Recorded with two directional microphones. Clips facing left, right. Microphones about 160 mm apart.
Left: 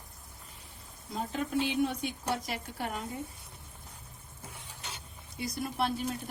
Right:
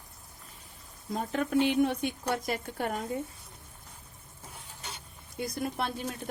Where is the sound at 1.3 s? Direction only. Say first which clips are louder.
Right 5 dB; 55° right (ahead or behind).